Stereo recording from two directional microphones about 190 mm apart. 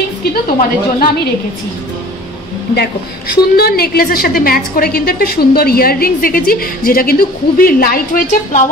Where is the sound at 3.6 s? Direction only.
55° left (ahead or behind).